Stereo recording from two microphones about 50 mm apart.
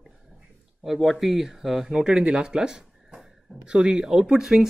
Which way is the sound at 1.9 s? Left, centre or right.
Centre.